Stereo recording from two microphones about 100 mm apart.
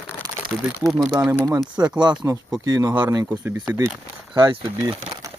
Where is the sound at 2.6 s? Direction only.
40° right (ahead or behind).